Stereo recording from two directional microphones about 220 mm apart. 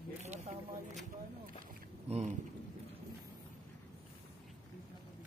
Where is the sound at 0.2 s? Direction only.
30° right (ahead or behind).